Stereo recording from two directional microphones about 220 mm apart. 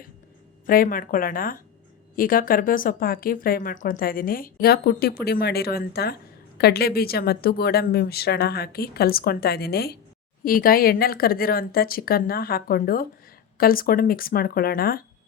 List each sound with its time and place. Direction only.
0.7 s speech: 40° left (ahead or behind)